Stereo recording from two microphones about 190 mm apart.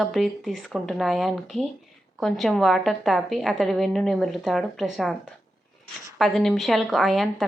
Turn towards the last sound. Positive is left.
turn(degrees=0)  # may be behind; listen again after turning